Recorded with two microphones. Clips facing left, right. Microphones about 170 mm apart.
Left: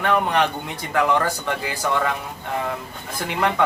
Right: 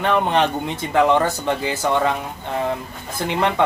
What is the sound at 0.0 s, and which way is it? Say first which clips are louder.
Speech: right 2 dB; 25° right (ahead or behind).